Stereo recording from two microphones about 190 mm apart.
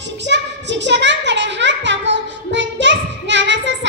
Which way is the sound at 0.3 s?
70° right (ahead or behind).